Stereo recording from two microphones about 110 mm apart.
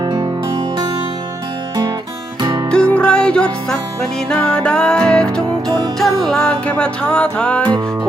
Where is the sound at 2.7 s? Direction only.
10° left (ahead or behind).